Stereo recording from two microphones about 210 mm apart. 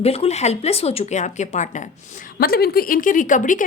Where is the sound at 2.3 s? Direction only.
45° left (ahead or behind).